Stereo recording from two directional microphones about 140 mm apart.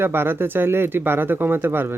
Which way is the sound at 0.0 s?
15° right (ahead or behind).